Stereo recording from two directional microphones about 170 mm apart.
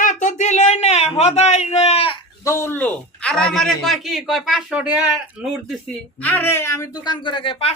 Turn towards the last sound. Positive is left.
turn(degrees=35)  # may be behind; listen again after turning